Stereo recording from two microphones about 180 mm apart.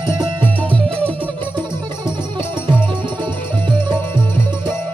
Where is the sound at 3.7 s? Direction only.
25° right (ahead or behind).